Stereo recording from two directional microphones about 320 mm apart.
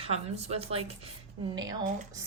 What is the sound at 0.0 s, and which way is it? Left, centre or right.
Speech, centre.